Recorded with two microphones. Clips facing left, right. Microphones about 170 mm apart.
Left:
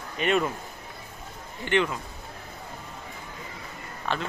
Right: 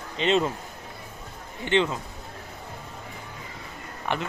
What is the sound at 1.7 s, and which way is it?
Speech, 20° right (ahead or behind).